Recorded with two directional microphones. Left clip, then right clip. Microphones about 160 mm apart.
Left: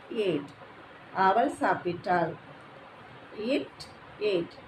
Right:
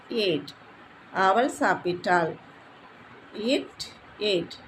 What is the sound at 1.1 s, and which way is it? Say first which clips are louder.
Speech: right 2 dB; 50° right (ahead or behind).